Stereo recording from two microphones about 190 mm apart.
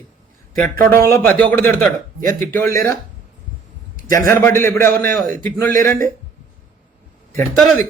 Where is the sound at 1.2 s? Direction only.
10° left (ahead or behind).